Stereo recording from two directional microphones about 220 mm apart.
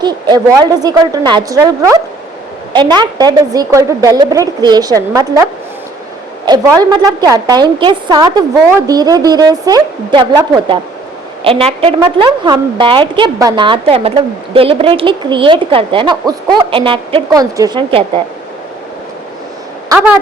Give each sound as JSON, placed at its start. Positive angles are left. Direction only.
{"t": 0.0, "sound": "a woman's voice", "side_deg": -20}